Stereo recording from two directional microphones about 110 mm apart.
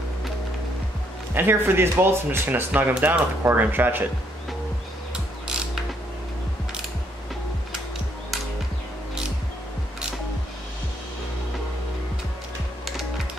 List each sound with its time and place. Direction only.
1.3 s speech: 20° right (ahead or behind)